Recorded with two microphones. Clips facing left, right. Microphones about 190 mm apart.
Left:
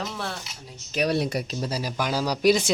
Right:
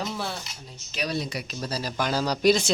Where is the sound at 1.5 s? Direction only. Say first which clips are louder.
Left 2 dB; 20° left (ahead or behind).